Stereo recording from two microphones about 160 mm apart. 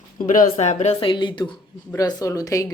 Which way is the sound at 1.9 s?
20° left (ahead or behind).